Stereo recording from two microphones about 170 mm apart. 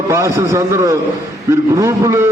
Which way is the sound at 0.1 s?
15° right (ahead or behind).